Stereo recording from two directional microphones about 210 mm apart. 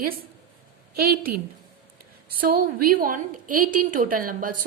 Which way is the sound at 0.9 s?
45° right (ahead or behind).